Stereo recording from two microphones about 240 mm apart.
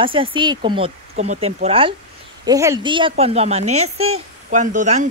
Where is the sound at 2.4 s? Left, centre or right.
Centre.